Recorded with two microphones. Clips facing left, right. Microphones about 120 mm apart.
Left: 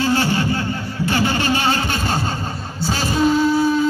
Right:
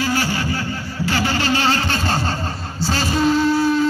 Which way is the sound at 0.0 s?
25° left (ahead or behind).